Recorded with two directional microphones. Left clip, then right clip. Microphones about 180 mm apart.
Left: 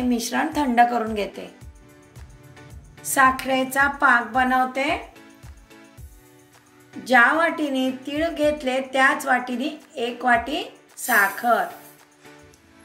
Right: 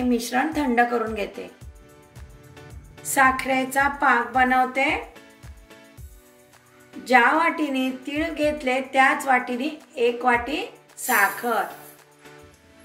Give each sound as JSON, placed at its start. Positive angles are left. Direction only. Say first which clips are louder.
{"t": 0.1, "sound": "speech", "louder": "right 2 dB", "side_deg": 35}
{"t": 3.2, "sound": "a woman's voice", "louder": "left 1 dB", "side_deg": 45}
{"t": 7.1, "sound": "a woman's voice", "louder": "left 1 dB", "side_deg": 45}